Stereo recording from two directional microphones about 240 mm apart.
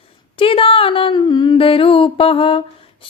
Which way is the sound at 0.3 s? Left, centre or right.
Left.